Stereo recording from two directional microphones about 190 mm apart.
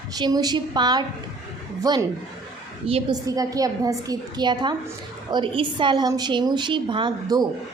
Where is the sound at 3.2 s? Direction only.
20° right (ahead or behind).